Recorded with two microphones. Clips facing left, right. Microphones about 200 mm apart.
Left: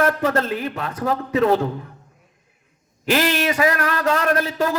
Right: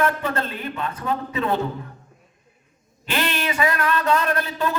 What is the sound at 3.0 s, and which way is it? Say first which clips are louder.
Speech: left 6 dB; 85° left.